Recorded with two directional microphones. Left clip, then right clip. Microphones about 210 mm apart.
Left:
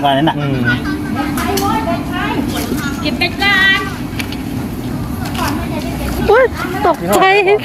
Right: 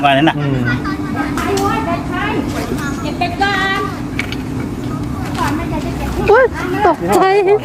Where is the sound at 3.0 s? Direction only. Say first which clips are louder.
Left 2 dB; 40° right (ahead or behind).